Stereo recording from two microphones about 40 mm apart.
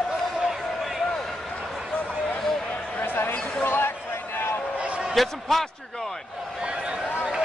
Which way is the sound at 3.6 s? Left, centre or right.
Left.